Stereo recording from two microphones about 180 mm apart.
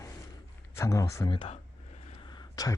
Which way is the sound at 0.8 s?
15° left (ahead or behind).